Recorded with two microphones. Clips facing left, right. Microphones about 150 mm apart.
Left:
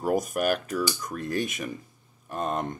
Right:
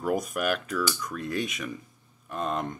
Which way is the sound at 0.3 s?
40° left (ahead or behind).